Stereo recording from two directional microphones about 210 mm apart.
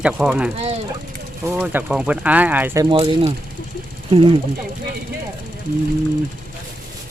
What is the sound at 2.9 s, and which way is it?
Speech, 25° right (ahead or behind).